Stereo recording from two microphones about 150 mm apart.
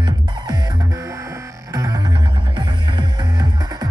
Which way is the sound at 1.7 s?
25° right (ahead or behind).